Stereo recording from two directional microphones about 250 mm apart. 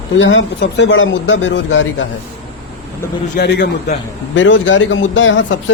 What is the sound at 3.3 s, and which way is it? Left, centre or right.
A man's voice, left.